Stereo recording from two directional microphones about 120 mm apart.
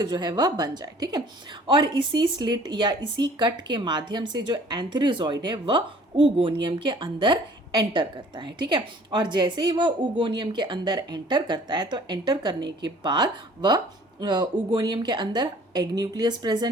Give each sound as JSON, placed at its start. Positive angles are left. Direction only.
{"t": 0.0, "sound": "a woman's voice", "side_deg": -35}